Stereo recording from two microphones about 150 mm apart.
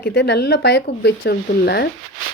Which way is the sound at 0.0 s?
90° left.